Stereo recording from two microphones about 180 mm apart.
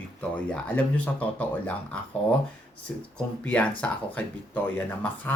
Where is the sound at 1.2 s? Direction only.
5° left (ahead or behind).